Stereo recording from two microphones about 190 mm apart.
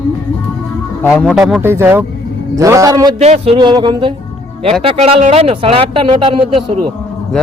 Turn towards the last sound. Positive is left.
turn(degrees=-30)  # may be behind; listen again after turning